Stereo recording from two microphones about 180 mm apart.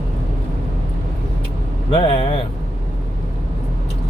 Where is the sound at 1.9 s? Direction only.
30° left (ahead or behind).